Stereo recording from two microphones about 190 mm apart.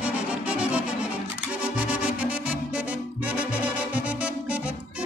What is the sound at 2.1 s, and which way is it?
Music, 5° right (ahead or behind).